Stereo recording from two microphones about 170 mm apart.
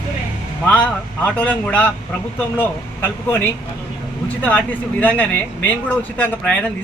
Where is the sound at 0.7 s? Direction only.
10° left (ahead or behind).